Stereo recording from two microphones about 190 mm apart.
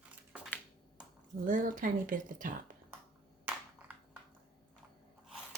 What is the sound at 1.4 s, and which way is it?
A woman's voice, 45° right (ahead or behind).